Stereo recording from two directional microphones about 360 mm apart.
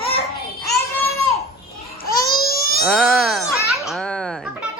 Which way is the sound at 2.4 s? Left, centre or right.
Left.